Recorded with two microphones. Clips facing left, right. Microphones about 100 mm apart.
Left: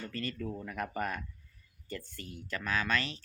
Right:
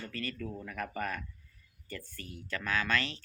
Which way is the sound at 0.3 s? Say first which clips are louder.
Left 2 dB; 15° left (ahead or behind).